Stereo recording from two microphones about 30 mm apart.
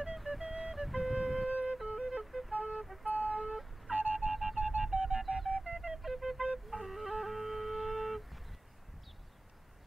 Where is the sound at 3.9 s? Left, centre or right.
Right.